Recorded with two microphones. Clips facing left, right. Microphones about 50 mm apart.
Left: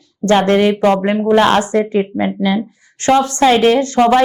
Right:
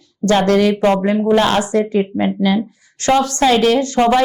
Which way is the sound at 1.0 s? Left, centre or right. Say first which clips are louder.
Left 2 dB; left.